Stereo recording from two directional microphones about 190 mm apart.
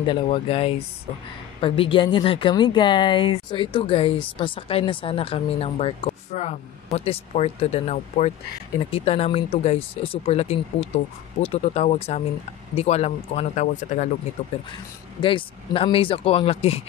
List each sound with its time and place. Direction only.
0.0 s speech: 25° left (ahead or behind)
15.2 s speech: 30° left (ahead or behind)